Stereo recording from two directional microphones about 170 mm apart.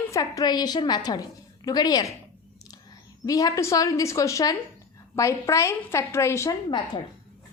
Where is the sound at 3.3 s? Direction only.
20° left (ahead or behind).